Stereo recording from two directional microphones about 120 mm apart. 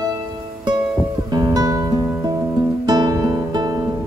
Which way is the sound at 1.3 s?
35° right (ahead or behind).